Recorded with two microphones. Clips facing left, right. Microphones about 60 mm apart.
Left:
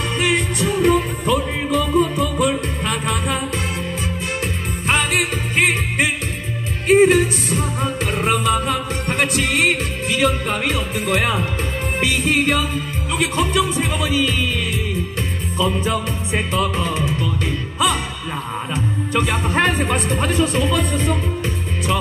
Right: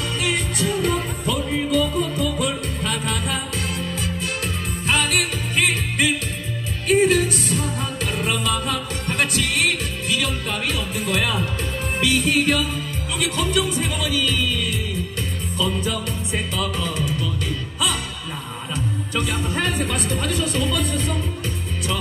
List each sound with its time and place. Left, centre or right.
0.2 s music: left
4.8 s music: left
18.8 s music: left